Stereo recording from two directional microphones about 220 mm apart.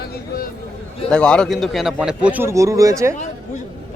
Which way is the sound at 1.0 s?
5° left (ahead or behind).